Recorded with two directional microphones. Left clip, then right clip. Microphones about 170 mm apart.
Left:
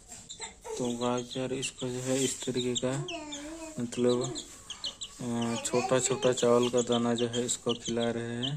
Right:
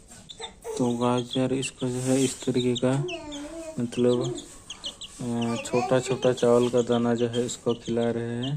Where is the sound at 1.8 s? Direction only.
5° right (ahead or behind).